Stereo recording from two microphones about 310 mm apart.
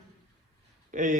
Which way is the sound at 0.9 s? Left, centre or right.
Right.